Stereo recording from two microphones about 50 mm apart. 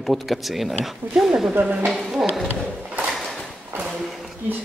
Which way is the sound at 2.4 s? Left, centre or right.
Right.